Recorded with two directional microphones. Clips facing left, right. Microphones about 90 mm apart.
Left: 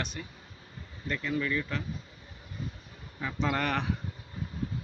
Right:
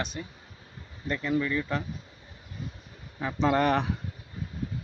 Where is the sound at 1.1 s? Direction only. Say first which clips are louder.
Right 3 dB; 15° right (ahead or behind).